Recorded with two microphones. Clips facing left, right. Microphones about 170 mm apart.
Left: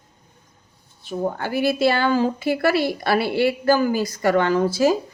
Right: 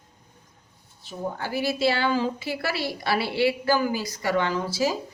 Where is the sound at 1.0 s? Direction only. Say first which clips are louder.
Left 6 dB; 60° left (ahead or behind).